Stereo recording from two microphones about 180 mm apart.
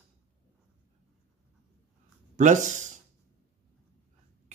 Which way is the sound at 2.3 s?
45° right (ahead or behind).